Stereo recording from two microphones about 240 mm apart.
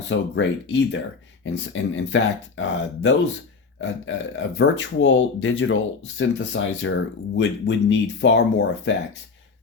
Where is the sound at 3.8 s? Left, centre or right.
Left.